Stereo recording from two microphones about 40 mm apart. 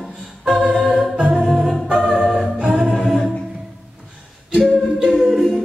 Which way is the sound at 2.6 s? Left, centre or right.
Right.